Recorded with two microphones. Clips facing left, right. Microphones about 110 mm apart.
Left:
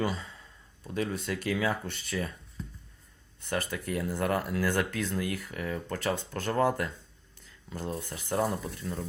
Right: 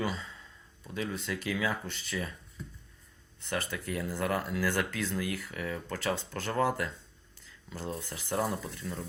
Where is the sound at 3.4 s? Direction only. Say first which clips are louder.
Left 2 dB; 40° left (ahead or behind).